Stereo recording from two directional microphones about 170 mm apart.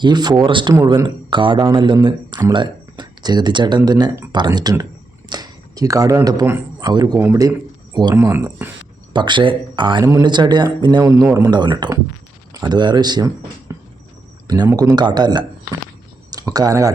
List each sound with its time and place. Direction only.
0.0 s speech: 25° right (ahead or behind)
9.1 s speech: 25° right (ahead or behind)